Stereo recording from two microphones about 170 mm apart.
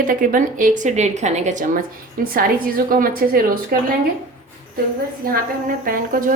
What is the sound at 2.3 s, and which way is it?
A woman's voice, 60° right (ahead or behind).